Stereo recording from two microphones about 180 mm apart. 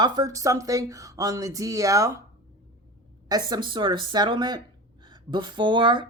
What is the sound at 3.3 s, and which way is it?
Speech, 20° right (ahead or behind).